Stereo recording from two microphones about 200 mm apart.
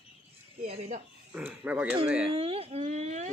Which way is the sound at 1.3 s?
5° right (ahead or behind).